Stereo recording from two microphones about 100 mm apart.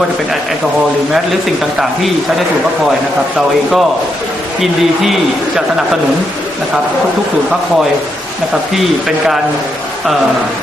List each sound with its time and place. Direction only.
3.3 s a man's voice: centre (ahead or behind)
8.7 s a man's voice: centre (ahead or behind)